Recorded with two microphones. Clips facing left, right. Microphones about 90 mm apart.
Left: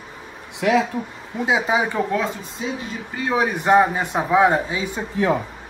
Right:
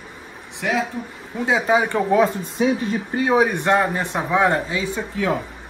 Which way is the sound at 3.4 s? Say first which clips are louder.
Left 3 dB; 5° left (ahead or behind).